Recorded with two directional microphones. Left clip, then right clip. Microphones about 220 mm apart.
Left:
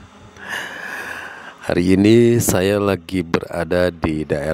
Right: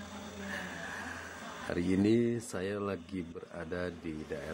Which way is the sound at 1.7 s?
50° left (ahead or behind).